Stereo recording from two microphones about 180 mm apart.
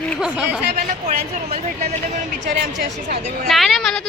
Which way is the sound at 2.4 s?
45° right (ahead or behind).